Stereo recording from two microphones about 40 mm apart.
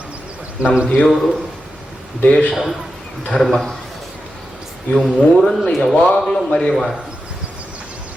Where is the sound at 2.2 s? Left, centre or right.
Left.